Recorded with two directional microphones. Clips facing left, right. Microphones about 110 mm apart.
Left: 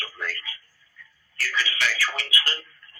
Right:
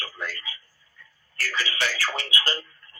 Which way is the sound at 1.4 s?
40° right (ahead or behind).